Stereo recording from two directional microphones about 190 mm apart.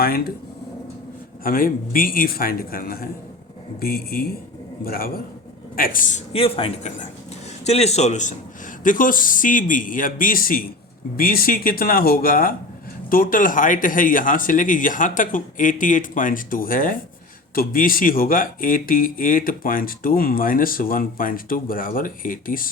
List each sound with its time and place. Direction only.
0.0 s speech: 50° left (ahead or behind)
1.5 s speech: 50° left (ahead or behind)